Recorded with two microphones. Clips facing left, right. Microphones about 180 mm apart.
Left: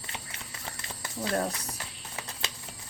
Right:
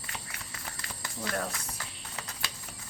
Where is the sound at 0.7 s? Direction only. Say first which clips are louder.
Left 2 dB; 25° left (ahead or behind).